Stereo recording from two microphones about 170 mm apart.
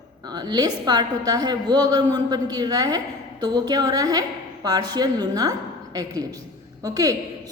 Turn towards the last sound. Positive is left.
turn(degrees=-20)  # may be behind; listen again after turning